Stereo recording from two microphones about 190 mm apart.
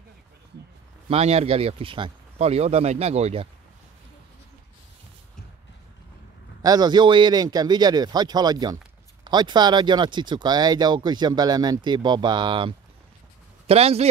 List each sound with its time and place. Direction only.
1.0 s speech: 35° right (ahead or behind)
6.6 s speech: 20° right (ahead or behind)